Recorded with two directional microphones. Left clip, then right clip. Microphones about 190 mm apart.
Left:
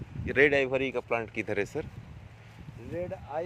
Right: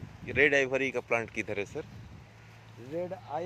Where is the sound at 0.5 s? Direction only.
5° left (ahead or behind).